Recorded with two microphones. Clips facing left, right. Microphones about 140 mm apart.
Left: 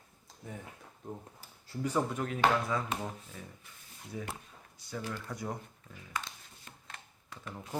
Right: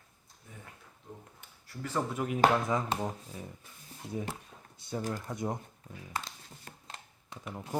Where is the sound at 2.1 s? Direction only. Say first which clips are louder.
Right 7 dB; 15° right (ahead or behind).